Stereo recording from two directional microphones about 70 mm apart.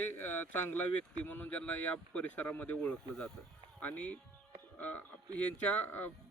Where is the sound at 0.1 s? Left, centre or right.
Left.